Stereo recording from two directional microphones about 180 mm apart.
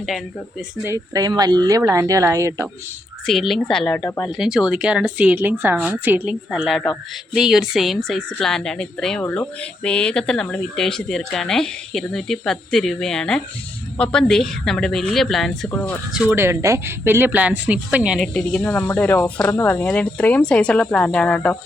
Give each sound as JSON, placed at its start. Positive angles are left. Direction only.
{"t": 0.9, "sound": "speech", "side_deg": -20}
{"t": 3.2, "sound": "speech", "side_deg": 0}
{"t": 16.3, "sound": "speech", "side_deg": -15}
{"t": 18.3, "sound": "speech", "side_deg": 5}